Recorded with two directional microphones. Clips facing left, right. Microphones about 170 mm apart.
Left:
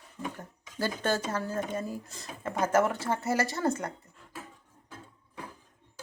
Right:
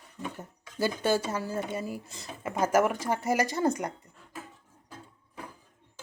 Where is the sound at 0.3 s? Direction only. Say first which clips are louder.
Right 3 dB; 10° right (ahead or behind).